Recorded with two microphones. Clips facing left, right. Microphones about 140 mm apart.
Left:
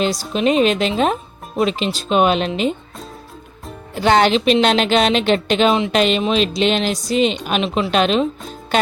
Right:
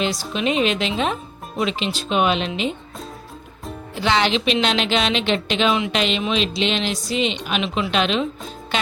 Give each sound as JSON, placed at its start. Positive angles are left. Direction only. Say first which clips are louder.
{"t": 0.0, "sound": "speech", "louder": "left 5 dB", "side_deg": 40}
{"t": 3.9, "sound": "a woman's voice", "louder": "left 6 dB", "side_deg": 45}
{"t": 5.7, "sound": "speech", "louder": "left 4 dB", "side_deg": 30}
{"t": 6.0, "sound": "a woman's voice", "louder": "left 5 dB", "side_deg": 45}